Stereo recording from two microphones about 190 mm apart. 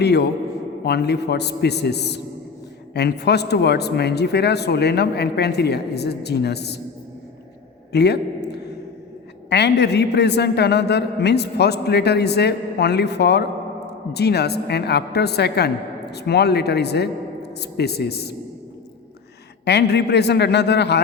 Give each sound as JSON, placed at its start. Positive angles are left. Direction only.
{"t": 0.0, "sound": "a man's voice", "side_deg": 60}
{"t": 7.9, "sound": "a sound", "side_deg": 60}
{"t": 9.5, "sound": "a man's voice", "side_deg": 60}
{"t": 19.6, "sound": "a man's voice", "side_deg": 60}